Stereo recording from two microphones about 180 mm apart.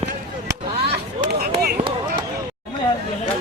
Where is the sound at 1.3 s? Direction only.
60° right (ahead or behind).